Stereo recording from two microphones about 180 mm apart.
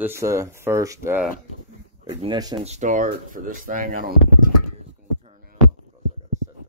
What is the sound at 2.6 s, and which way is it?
Speech, 40° right (ahead or behind).